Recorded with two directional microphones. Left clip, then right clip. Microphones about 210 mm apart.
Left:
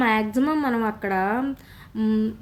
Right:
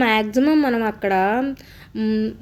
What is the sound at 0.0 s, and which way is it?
A woman's voice, 5° right (ahead or behind).